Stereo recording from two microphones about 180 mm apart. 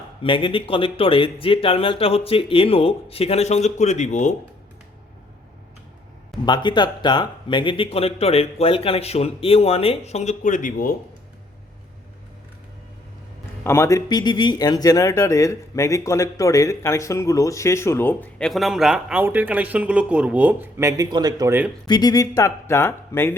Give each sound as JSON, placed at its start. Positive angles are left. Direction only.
{"t": 0.2, "sound": "speech", "side_deg": 30}
{"t": 6.4, "sound": "speech", "side_deg": 25}
{"t": 13.7, "sound": "speech", "side_deg": 15}
{"t": 21.8, "sound": "speech", "side_deg": 20}